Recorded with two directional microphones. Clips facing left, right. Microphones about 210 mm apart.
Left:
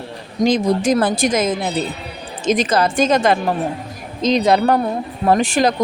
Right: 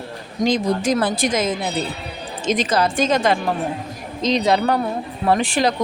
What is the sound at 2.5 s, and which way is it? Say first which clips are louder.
Speech: left 3 dB; 45° left (ahead or behind).